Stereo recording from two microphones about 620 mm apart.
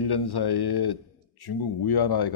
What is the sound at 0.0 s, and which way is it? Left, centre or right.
Speech, left.